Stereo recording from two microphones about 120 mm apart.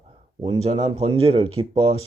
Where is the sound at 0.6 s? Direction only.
65° right (ahead or behind).